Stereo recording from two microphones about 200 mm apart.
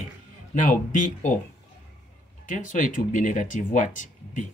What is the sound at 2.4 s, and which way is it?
Speech, 40° left (ahead or behind).